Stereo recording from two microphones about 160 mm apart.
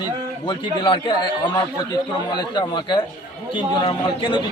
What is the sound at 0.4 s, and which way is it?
A man's voice, 30° left (ahead or behind).